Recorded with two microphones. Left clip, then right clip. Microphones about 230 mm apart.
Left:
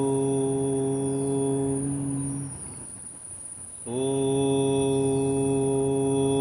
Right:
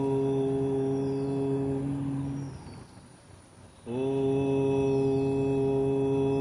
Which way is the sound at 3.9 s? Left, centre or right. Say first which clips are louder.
Left 2 dB; left.